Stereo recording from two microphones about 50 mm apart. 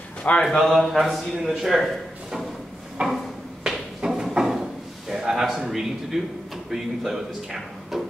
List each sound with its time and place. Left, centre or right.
0.2 s a man's voice: centre
0.6 s speech: centre
3.0 s a sound: right
4.0 s drawer open or close: centre
6.7 s speech: centre